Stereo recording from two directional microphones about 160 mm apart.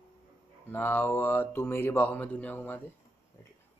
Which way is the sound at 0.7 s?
15° left (ahead or behind).